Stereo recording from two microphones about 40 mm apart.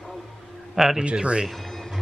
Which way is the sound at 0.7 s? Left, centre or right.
Centre.